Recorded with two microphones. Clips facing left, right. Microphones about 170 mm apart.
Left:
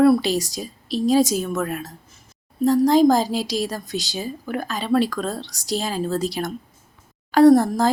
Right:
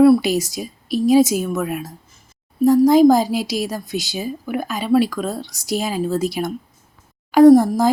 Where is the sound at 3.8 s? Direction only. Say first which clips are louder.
Right 3 dB; 40° left (ahead or behind).